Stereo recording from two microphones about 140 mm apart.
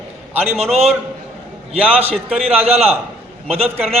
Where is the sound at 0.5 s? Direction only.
50° right (ahead or behind).